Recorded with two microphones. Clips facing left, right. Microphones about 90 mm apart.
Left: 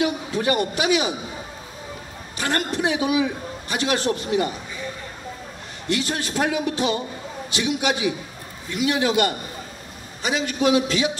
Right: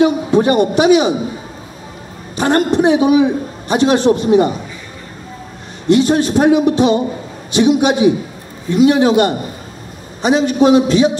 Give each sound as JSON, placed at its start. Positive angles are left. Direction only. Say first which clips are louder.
{"t": 0.0, "sound": "a man's voice", "louder": "right 11 dB", "side_deg": -25}
{"t": 2.3, "sound": "a man's voice", "louder": "right 11 dB", "side_deg": -25}
{"t": 5.9, "sound": "a man's voice", "louder": "right 14 dB", "side_deg": -25}